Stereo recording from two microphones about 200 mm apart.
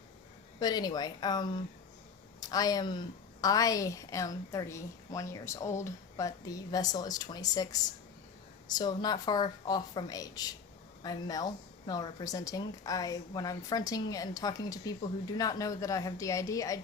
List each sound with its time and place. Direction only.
0.6 s a woman's voice: 20° left (ahead or behind)
8.8 s a woman's voice: 20° left (ahead or behind)